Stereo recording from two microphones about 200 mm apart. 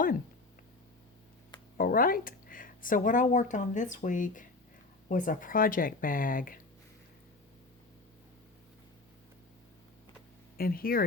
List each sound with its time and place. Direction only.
1.8 s speech: 45° left (ahead or behind)
10.6 s speech: 45° left (ahead or behind)